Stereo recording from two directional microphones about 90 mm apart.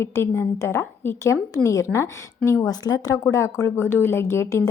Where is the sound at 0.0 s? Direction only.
30° left (ahead or behind).